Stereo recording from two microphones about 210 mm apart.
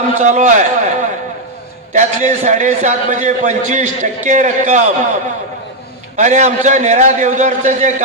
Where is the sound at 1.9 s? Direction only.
35° right (ahead or behind).